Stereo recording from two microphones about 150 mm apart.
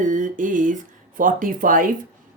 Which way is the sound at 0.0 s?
60° right (ahead or behind).